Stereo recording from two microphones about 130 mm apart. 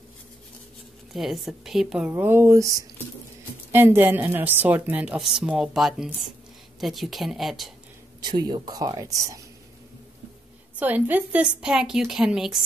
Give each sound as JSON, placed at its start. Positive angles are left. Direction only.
{"t": 1.1, "sound": "a woman's voice", "side_deg": 0}
{"t": 3.7, "sound": "a woman's voice", "side_deg": -15}
{"t": 8.2, "sound": "speech", "side_deg": -35}
{"t": 10.8, "sound": "a woman's voice", "side_deg": -15}